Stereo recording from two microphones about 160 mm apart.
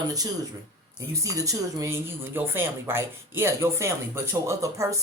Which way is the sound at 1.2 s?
20° right (ahead or behind).